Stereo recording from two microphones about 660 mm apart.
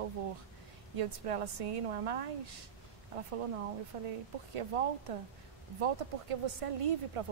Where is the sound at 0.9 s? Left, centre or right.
Right.